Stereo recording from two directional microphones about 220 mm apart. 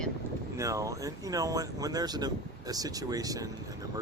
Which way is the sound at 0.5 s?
15° right (ahead or behind).